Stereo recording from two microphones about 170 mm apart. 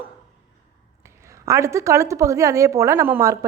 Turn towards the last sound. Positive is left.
turn(degrees=-15)  # may be behind; listen again after turning